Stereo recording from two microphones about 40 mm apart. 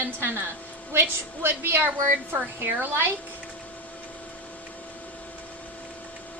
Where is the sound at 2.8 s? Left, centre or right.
Right.